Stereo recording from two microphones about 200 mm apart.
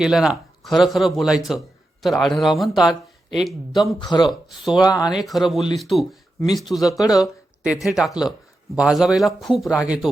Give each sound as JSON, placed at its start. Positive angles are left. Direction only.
{"t": 0.0, "sound": "speech", "side_deg": -5}
{"t": 4.0, "sound": "speech", "side_deg": 20}
{"t": 4.3, "sound": "speech", "side_deg": 0}
{"t": 4.9, "sound": "speech", "side_deg": 20}
{"t": 5.1, "sound": "speech", "side_deg": 0}